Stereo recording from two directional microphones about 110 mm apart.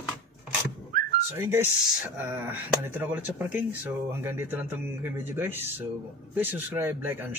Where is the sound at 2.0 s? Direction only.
15° right (ahead or behind).